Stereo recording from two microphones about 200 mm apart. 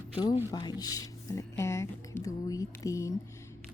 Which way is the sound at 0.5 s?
20° left (ahead or behind).